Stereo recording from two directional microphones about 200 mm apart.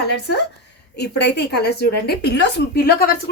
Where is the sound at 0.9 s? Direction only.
55° left (ahead or behind).